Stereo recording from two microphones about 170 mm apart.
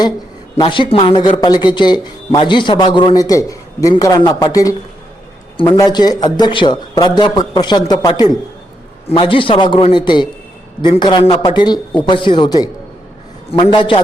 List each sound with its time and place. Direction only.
0.5 s speech: 30° left (ahead or behind)